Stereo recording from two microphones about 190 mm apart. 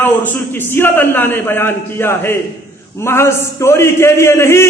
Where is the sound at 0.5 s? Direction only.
10° left (ahead or behind).